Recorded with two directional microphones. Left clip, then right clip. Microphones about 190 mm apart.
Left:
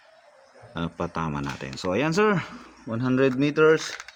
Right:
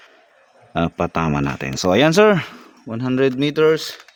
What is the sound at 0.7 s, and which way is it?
Speech, 50° right (ahead or behind).